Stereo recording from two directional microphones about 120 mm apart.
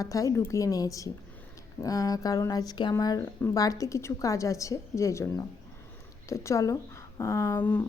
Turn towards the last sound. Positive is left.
turn(degrees=15)  # may be behind; listen again after turning